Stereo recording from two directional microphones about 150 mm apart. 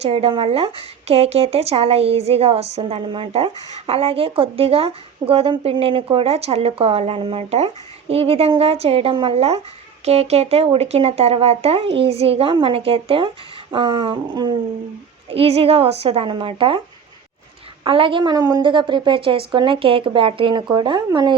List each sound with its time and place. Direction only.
0.0 s speech: 40° right (ahead or behind)
17.8 s speech: 35° right (ahead or behind)